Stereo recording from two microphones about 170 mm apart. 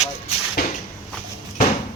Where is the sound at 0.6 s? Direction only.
60° left (ahead or behind).